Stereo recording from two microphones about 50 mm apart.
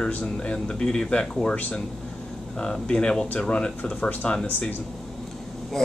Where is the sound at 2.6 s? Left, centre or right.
Centre.